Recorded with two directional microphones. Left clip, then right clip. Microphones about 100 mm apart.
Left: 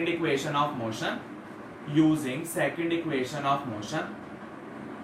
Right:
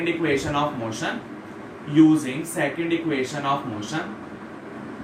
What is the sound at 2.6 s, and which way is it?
Speech, 25° left (ahead or behind).